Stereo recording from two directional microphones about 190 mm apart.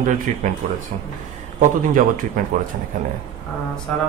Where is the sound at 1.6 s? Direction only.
40° right (ahead or behind).